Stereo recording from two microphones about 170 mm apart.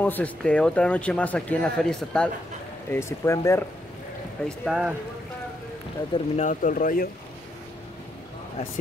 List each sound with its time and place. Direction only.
0.0 s speech: 10° left (ahead or behind)
2.9 s speech: 15° left (ahead or behind)
4.5 s speech: 5° right (ahead or behind)
6.1 s speech: 45° left (ahead or behind)